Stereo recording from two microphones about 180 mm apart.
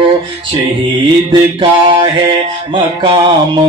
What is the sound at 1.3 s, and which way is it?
Music, 25° right (ahead or behind).